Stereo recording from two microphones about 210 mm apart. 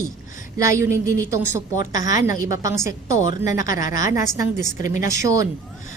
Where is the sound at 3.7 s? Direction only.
15° right (ahead or behind).